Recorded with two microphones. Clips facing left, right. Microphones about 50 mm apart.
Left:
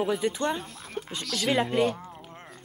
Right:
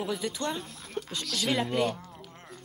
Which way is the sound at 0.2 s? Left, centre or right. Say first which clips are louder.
Left 5 dB; left.